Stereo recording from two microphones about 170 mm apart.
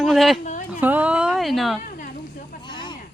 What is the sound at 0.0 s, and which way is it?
Speech, centre (ahead or behind).